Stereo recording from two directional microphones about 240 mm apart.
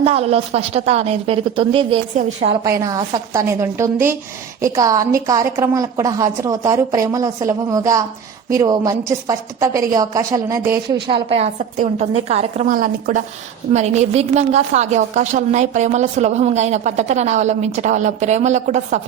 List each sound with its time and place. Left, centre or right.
0.0 s a woman's voice: right
2.6 s a woman's voice: centre; by 18.9 s right